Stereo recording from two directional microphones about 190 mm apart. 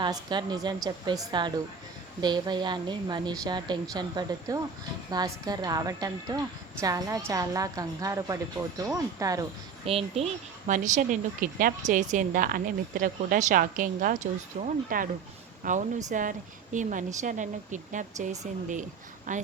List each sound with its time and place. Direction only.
0.0 s a woman's voice: 25° right (ahead or behind)
9.8 s speech: 30° right (ahead or behind)
10.7 s a woman's voice: 40° right (ahead or behind)